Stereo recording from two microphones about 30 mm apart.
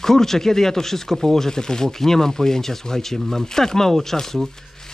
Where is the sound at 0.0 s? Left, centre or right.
Centre.